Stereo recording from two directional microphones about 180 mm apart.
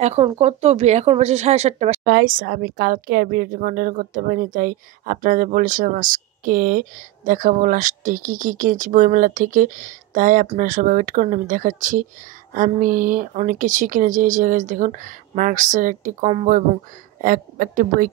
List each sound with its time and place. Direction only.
0.0 s speech: 35° right (ahead or behind)
2.0 s speech: 55° right (ahead or behind)